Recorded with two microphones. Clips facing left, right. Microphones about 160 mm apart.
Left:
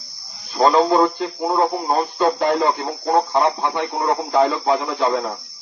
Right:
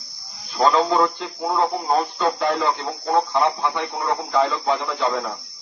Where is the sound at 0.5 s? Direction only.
35° left (ahead or behind).